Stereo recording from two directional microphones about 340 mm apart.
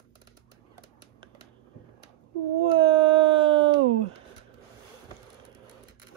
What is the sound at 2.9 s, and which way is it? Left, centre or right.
Howl, centre.